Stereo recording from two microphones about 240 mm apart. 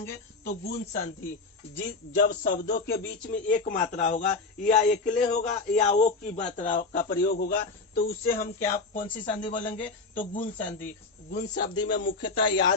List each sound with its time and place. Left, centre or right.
0.4 s a man's voice: left
11.3 s a man's voice: left
12.4 s speech: centre